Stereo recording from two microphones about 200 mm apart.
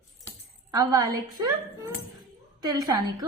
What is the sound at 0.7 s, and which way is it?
Speech, 20° right (ahead or behind).